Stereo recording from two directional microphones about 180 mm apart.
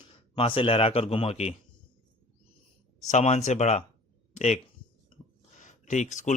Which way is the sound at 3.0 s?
40° left (ahead or behind).